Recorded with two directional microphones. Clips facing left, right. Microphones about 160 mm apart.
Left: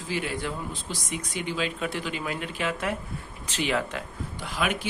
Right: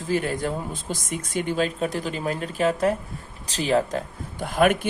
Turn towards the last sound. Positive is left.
turn(degrees=-50)  # may be behind; listen again after turning